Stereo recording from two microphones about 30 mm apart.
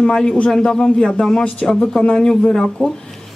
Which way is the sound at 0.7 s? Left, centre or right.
Left.